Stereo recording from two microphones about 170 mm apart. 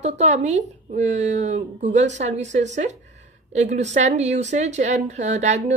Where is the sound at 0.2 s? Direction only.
45° right (ahead or behind).